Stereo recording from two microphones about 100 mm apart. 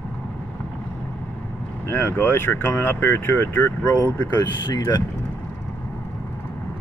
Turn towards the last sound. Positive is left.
turn(degrees=45)  # may be behind; listen again after turning